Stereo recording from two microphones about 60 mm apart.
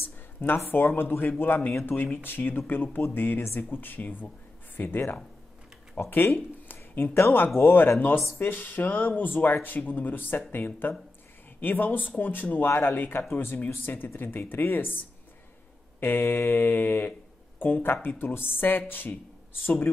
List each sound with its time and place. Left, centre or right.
0.4 s speech: left